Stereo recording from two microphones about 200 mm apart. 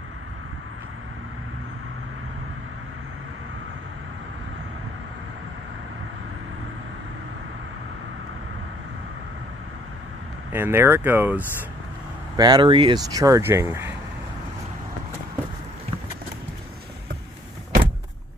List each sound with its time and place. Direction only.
10.5 s speech: 10° right (ahead or behind)
12.4 s speech: 20° right (ahead or behind)